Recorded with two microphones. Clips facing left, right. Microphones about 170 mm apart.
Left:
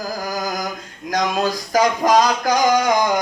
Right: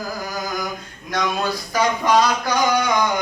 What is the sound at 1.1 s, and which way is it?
Speech, 40° left (ahead or behind).